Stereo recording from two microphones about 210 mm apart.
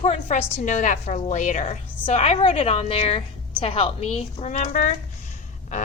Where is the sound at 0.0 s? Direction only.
35° left (ahead or behind).